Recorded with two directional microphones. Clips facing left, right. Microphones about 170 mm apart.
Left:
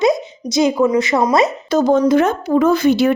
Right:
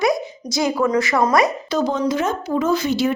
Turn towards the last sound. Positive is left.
turn(degrees=60)  # may be behind; listen again after turning